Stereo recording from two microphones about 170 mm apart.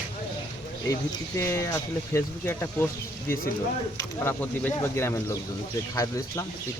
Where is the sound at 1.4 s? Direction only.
15° left (ahead or behind).